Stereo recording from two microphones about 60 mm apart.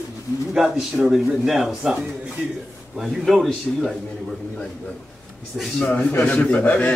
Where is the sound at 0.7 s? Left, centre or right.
Centre.